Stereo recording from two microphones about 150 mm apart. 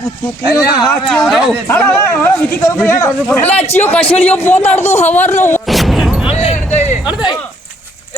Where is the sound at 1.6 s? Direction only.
10° left (ahead or behind).